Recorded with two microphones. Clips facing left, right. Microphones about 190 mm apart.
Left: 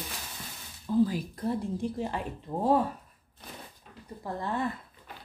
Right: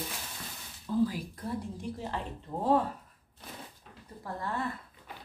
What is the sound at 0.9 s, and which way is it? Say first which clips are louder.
Speech: left 3 dB; 15° left (ahead or behind).